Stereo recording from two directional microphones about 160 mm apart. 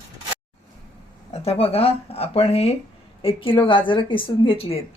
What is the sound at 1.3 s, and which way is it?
A woman's voice, 40° left (ahead or behind).